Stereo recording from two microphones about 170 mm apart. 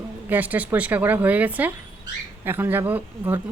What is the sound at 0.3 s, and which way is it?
A woman's voice, 10° right (ahead or behind).